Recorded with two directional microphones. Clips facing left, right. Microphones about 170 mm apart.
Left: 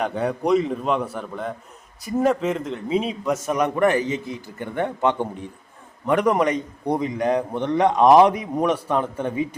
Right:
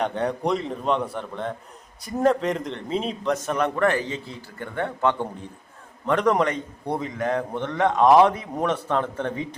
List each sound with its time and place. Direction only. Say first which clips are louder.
0.0 s a man's voice: left 1 dB; 5° left (ahead or behind)